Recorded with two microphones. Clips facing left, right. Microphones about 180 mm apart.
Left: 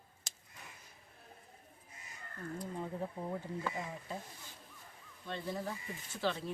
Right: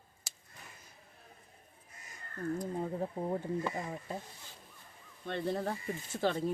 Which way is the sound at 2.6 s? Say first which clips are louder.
Right 5 dB; 35° right (ahead or behind).